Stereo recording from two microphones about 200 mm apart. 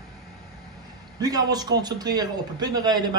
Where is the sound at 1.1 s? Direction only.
20° right (ahead or behind).